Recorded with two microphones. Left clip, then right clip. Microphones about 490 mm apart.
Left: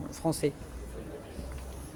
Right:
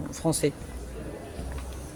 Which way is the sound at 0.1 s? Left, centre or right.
Left.